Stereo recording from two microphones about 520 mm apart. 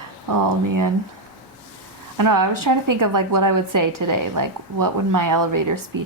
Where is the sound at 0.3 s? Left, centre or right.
Right.